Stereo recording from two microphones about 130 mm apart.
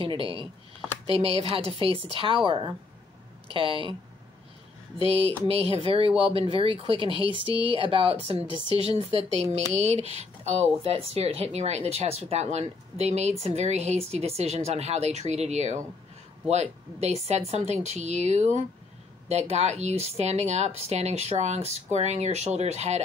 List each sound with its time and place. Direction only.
0.0 s speech: 45° right (ahead or behind)
4.9 s speech: 50° right (ahead or behind)